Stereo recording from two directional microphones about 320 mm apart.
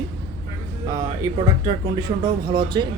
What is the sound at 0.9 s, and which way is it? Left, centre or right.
Speech, centre.